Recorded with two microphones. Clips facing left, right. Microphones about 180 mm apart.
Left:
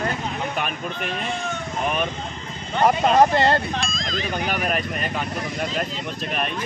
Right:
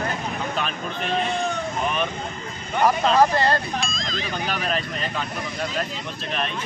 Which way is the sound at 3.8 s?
Centre (ahead or behind).